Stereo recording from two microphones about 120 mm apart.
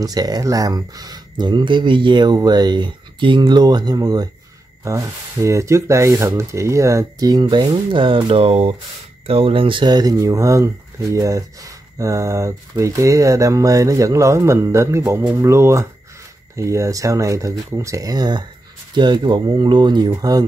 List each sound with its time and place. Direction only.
0.0 s speech: 30° right (ahead or behind)